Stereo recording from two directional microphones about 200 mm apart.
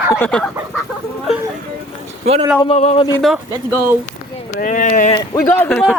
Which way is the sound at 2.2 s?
30° right (ahead or behind).